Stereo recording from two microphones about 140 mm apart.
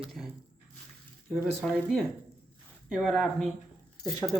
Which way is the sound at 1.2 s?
5° right (ahead or behind).